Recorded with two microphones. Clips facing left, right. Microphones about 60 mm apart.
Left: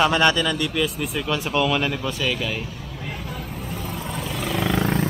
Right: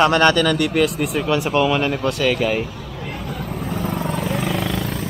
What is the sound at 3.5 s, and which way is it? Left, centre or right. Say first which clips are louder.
Vehicle: right 7 dB; right.